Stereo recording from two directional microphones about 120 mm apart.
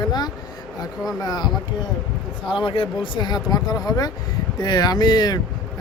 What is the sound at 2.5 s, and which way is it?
Speech, 45° left (ahead or behind).